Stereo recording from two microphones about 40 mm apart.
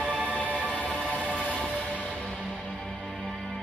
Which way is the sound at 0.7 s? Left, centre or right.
Left.